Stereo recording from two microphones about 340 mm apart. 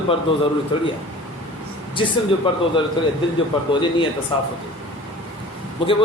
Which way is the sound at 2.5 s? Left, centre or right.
Centre.